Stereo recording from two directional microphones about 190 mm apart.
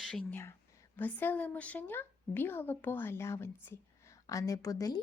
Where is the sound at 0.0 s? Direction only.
5° left (ahead or behind).